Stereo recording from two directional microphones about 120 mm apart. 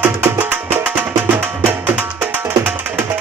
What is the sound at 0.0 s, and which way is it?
Music, 15° right (ahead or behind).